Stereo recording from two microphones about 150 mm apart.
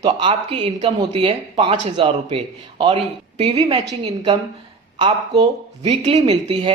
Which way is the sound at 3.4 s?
35° right (ahead or behind).